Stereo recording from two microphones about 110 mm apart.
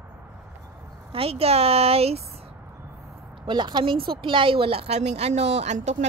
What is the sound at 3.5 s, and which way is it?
Speech, 45° right (ahead or behind).